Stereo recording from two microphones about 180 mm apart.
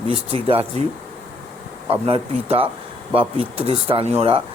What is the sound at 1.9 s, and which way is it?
Speech, 30° right (ahead or behind).